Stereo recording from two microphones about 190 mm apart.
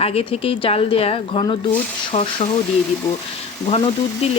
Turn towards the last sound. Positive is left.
turn(degrees=30)  # may be behind; listen again after turning